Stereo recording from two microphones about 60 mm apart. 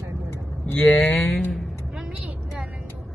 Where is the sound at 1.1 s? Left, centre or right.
Centre.